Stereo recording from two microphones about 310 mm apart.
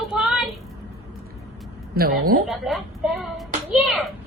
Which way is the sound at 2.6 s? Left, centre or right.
Centre.